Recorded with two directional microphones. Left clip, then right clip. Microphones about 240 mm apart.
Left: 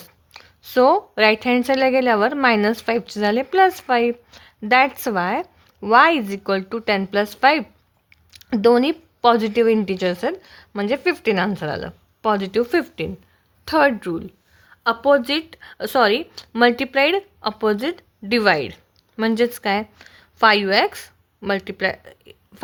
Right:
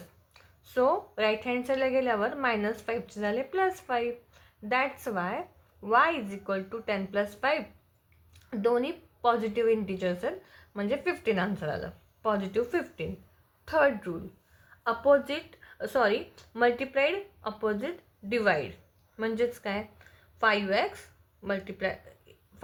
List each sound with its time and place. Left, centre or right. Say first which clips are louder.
0.3 s a woman's voice: left 15 dB; left